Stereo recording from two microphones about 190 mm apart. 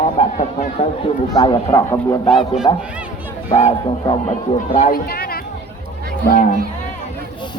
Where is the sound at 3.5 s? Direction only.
35° left (ahead or behind).